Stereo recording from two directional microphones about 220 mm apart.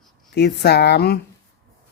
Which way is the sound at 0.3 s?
50° left (ahead or behind).